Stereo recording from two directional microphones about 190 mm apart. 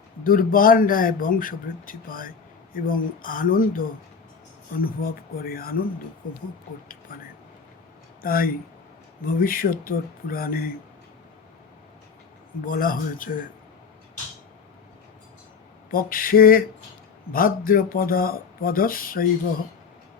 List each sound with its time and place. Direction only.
0.3 s a man's voice: 50° left (ahead or behind)
7.1 s a man's voice: 45° left (ahead or behind)
12.6 s a man's voice: 45° left (ahead or behind)
15.9 s a man's voice: 50° left (ahead or behind)